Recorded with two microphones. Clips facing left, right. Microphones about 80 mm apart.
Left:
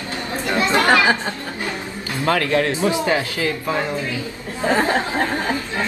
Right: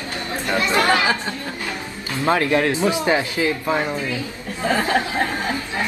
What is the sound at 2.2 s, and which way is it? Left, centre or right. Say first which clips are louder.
Speech: right 1 dB; right.